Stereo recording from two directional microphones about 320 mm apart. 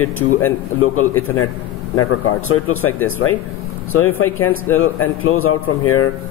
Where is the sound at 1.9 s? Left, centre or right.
Left.